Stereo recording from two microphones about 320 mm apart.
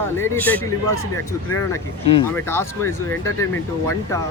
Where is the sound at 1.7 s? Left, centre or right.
Centre.